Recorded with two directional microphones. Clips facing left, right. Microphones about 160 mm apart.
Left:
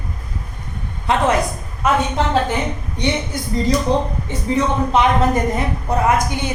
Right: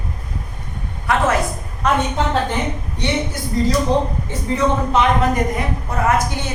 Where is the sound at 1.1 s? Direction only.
25° left (ahead or behind).